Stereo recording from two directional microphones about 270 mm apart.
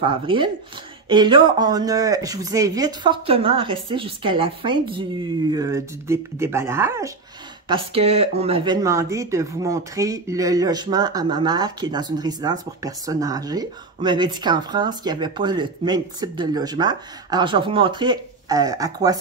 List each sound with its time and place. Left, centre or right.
0.0 s speech: centre
7.6 s speech: centre